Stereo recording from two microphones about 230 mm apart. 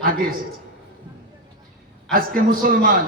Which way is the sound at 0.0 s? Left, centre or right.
Right.